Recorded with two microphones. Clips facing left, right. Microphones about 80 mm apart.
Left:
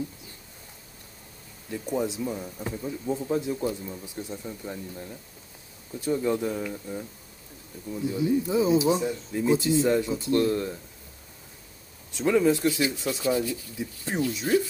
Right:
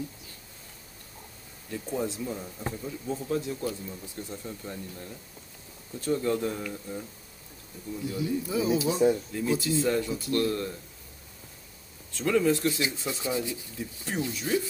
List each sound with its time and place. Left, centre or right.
1.7 s speech: centre
8.0 s speech: left
12.1 s speech: centre
12.8 s speech: right
13.7 s speech: left